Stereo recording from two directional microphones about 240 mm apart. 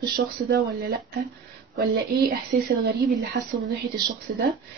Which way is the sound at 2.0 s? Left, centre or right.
Right.